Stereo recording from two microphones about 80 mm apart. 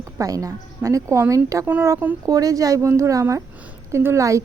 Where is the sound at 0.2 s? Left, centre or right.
Right.